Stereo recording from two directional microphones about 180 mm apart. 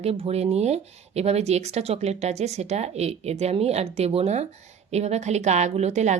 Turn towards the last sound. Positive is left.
turn(degrees=-40)  # may be behind; listen again after turning